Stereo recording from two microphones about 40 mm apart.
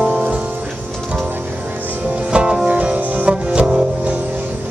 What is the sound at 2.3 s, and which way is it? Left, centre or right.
Music, right.